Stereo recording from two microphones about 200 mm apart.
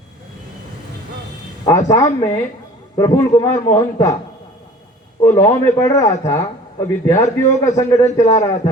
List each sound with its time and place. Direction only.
1.9 s a man's voice: 15° left (ahead or behind)
5.2 s a man's voice: 15° left (ahead or behind)
7.2 s a man's voice: 35° left (ahead or behind)
7.8 s a man's voice: 15° left (ahead or behind)